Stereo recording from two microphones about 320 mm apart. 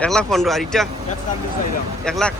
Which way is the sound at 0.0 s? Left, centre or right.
Centre.